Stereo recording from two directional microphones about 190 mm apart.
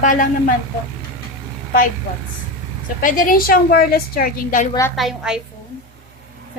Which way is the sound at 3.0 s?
50° left (ahead or behind).